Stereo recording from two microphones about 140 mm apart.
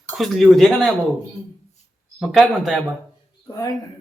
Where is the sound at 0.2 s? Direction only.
Centre (ahead or behind).